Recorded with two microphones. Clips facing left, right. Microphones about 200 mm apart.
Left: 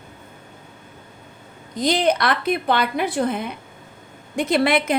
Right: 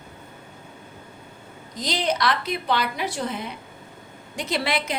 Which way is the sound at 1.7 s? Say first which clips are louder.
Left 6 dB; 55° left (ahead or behind).